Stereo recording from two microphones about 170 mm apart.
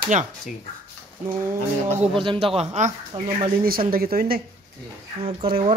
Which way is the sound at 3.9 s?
60° right (ahead or behind).